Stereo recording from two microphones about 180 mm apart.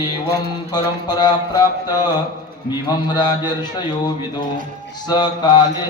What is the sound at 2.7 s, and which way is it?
Speech, 25° left (ahead or behind).